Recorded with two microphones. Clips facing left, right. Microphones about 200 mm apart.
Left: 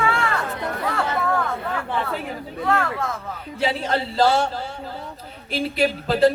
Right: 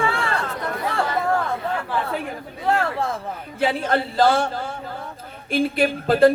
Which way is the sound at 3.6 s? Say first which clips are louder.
Right 2 dB; 55° right (ahead or behind).